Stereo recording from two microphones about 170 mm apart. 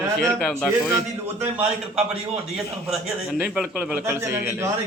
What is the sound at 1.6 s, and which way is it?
A man's voice, 5° right (ahead or behind).